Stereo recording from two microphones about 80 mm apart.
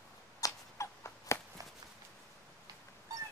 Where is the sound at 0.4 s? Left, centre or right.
Left.